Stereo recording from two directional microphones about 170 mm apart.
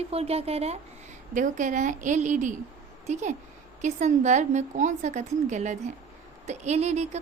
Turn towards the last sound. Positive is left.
turn(degrees=-40)  # may be behind; listen again after turning